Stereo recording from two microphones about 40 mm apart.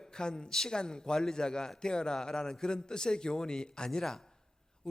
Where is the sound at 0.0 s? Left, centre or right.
Centre.